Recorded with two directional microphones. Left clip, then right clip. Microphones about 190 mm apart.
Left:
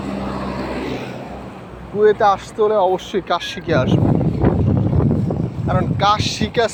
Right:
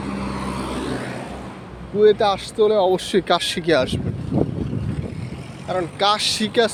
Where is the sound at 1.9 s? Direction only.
35° right (ahead or behind); by 3.8 s 60° right (ahead or behind).